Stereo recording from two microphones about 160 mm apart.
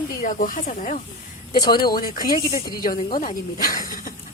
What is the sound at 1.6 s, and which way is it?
A woman's voice, 70° left (ahead or behind).